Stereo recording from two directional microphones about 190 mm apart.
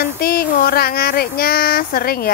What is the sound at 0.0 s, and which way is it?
A woman's voice, 55° left (ahead or behind).